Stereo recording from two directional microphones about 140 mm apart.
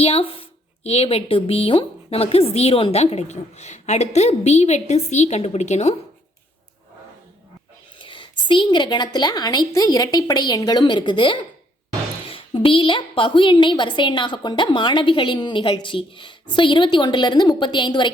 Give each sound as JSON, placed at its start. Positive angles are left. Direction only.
{"t": 0.0, "sound": "a woman's voice", "side_deg": 45}
{"t": 7.9, "sound": "a woman's voice", "side_deg": 35}